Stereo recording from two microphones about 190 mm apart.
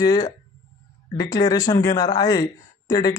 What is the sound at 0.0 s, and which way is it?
Speech, 20° left (ahead or behind).